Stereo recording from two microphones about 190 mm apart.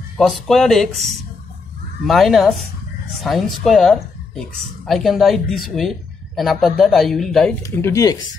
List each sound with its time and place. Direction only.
0.2 s speech: centre (ahead or behind)
7.6 s speech: 15° left (ahead or behind)